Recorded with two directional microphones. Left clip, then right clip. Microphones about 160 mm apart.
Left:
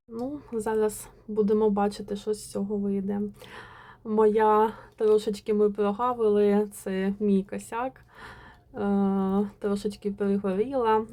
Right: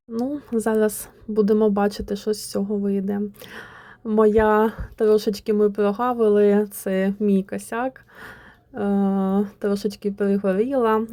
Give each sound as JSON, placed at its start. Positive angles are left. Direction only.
{"t": 0.1, "sound": "a woman's voice", "side_deg": -25}